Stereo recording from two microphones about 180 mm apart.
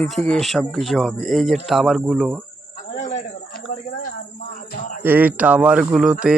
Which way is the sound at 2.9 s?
40° left (ahead or behind).